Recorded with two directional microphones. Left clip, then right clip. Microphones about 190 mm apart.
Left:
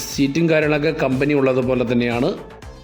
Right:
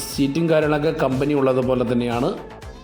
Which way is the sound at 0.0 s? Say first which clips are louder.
Left 2 dB; 10° left (ahead or behind).